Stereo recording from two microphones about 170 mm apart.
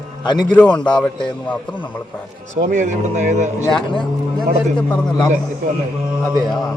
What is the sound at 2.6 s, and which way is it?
Speech, 50° right (ahead or behind).